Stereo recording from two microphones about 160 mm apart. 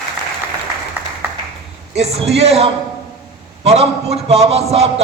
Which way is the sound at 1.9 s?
40° right (ahead or behind).